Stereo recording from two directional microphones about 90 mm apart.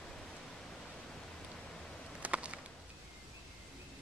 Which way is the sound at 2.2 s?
15° right (ahead or behind).